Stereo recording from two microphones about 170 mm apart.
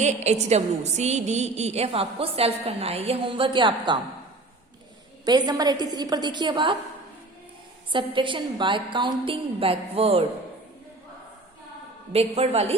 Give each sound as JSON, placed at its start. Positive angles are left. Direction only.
{"t": 0.0, "sound": "a woman's voice", "side_deg": -40}
{"t": 5.2, "sound": "a woman's voice", "side_deg": -25}
{"t": 7.9, "sound": "a woman's voice", "side_deg": -30}
{"t": 12.1, "sound": "a woman's voice", "side_deg": -35}